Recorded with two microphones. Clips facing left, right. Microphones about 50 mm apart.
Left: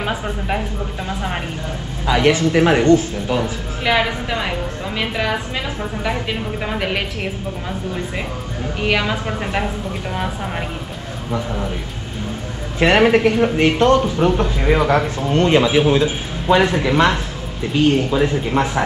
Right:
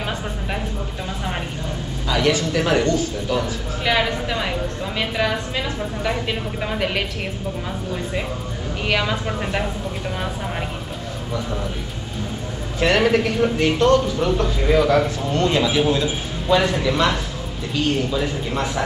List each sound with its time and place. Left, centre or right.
0.0 s a woman's voice: centre
2.0 s speech: left
3.8 s a woman's voice: centre
12.7 s speech: left